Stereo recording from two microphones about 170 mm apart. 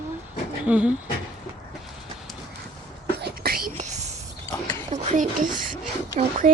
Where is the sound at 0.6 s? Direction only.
10° right (ahead or behind).